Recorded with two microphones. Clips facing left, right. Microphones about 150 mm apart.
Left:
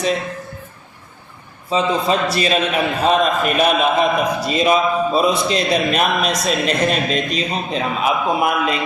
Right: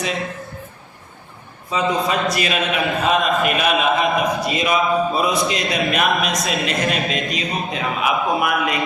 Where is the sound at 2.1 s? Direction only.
30° left (ahead or behind).